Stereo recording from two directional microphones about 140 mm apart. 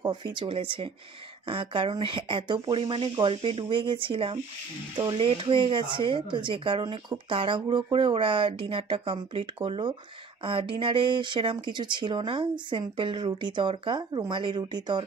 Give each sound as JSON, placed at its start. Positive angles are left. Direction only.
{"t": 0.0, "sound": "speech", "side_deg": -30}